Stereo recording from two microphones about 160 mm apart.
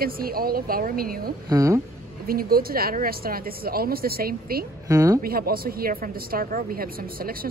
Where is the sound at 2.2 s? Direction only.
65° right (ahead or behind).